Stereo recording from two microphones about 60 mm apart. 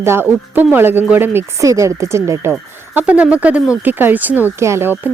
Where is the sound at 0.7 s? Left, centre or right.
Right.